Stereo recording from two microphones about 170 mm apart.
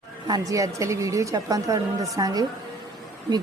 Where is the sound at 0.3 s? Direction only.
20° right (ahead or behind).